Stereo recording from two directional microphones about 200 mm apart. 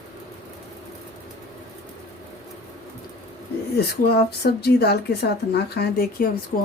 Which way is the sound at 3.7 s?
50° left (ahead or behind).